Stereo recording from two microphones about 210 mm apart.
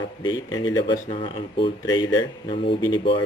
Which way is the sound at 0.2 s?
20° left (ahead or behind).